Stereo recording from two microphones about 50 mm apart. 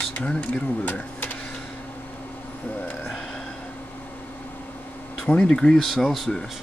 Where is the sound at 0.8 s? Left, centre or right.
Left.